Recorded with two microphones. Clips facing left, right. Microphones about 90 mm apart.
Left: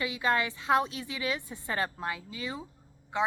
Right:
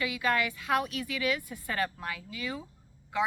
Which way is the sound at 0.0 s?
25° left (ahead or behind).